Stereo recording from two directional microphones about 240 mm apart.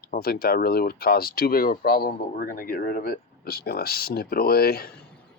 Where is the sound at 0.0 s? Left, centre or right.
Left.